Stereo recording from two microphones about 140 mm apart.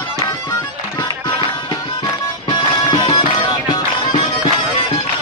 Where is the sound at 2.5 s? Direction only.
30° left (ahead or behind).